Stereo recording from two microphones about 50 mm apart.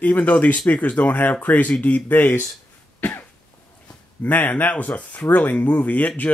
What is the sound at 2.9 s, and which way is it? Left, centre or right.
Cough, left.